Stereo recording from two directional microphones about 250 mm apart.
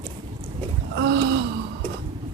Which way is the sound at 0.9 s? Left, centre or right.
Right.